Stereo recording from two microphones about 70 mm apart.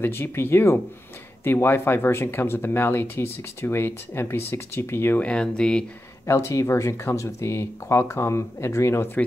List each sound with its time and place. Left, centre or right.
0.0 s speech: left
5.2 s speech: centre
6.2 s speech: left